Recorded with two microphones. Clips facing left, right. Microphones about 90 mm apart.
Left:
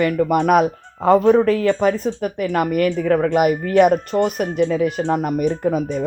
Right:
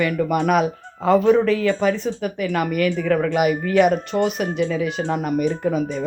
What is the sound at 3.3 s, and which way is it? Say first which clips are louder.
Speech: left 3 dB; 45° left (ahead or behind).